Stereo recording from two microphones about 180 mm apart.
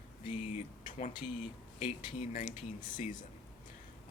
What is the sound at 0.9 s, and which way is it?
Speech, 45° left (ahead or behind).